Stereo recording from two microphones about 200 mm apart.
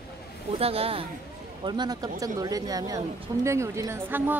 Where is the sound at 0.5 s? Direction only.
30° right (ahead or behind).